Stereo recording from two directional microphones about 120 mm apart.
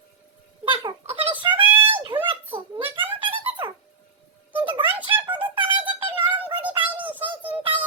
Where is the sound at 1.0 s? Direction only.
50° right (ahead or behind).